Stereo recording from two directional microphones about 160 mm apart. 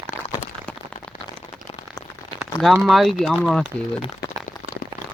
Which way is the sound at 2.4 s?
Centre (ahead or behind).